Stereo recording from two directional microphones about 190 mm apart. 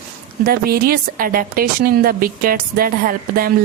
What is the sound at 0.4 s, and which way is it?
A woman's voice, 50° right (ahead or behind).